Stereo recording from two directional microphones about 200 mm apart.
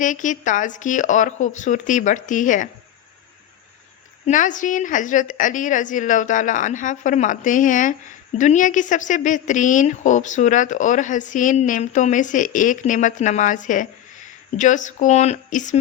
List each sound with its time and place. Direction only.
0.0 s speech: 40° left (ahead or behind)
4.3 s speech: 40° left (ahead or behind)